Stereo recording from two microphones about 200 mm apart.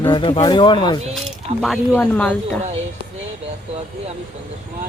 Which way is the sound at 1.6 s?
5° left (ahead or behind).